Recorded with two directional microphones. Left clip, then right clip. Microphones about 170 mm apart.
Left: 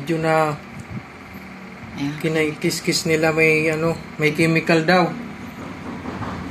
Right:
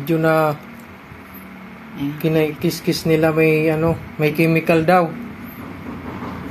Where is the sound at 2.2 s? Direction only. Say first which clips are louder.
Right 3 dB; 60° right (ahead or behind).